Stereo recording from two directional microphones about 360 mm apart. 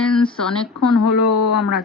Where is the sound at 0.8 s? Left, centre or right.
Left.